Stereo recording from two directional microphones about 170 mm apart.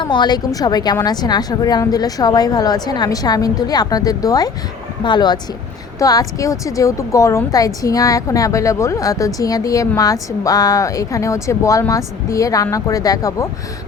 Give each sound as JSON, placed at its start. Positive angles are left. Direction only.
{"t": 0.0, "sound": "a woman's voice", "side_deg": 25}